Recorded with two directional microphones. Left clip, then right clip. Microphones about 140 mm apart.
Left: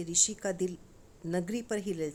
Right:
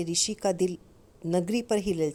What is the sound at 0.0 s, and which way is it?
A woman's voice, 35° right (ahead or behind).